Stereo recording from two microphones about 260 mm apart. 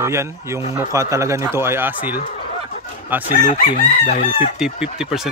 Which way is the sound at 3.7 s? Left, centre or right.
Left.